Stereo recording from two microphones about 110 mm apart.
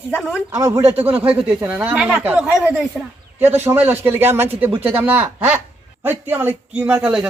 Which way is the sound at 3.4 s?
20° right (ahead or behind).